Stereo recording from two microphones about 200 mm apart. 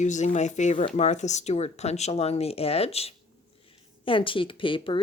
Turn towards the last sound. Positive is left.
turn(degrees=25)  # may be behind; listen again after turning